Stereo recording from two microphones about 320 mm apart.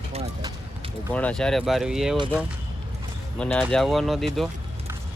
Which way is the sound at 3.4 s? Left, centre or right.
Centre.